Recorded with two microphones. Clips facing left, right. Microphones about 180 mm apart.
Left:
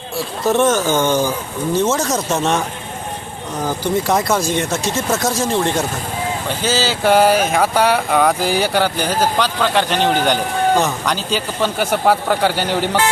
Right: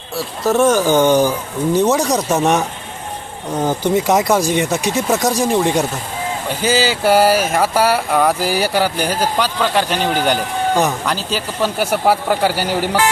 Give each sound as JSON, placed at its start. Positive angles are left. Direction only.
{"t": 0.4, "sound": "speech", "side_deg": -10}
{"t": 11.1, "sound": "speech", "side_deg": -5}